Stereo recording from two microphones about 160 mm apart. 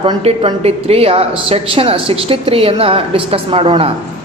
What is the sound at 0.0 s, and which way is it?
A woman's voice, 35° right (ahead or behind).